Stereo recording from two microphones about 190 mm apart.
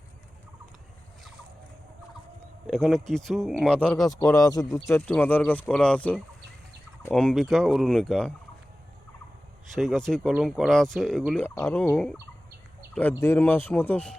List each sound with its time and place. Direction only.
2.6 s speech: centre (ahead or behind)
4.1 s speech: 20° left (ahead or behind); by 8.3 s 5° left (ahead or behind)
9.7 s speech: centre (ahead or behind)
11.4 s speech: 15° left (ahead or behind)